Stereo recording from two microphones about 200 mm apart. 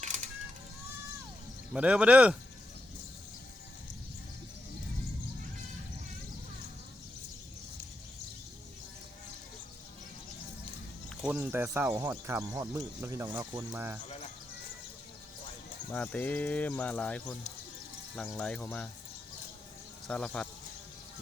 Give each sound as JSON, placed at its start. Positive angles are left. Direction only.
{"t": 0.0, "sound": "a sound", "side_deg": -35}
{"t": 1.7, "sound": "speech", "side_deg": -5}
{"t": 11.2, "sound": "speech", "side_deg": -10}
{"t": 15.9, "sound": "speech", "side_deg": 10}
{"t": 20.1, "sound": "speech", "side_deg": 5}